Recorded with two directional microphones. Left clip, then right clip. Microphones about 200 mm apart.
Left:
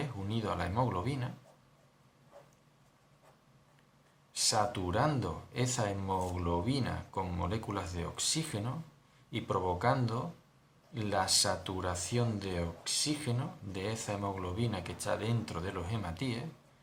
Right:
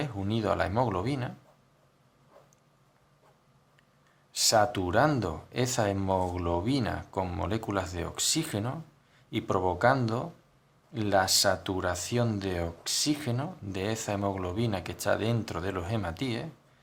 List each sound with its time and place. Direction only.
0.0 s speech: 45° right (ahead or behind)
4.3 s speech: 50° right (ahead or behind)